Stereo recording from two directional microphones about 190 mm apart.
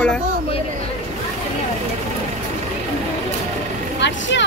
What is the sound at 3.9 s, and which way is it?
Speech, 70° left (ahead or behind).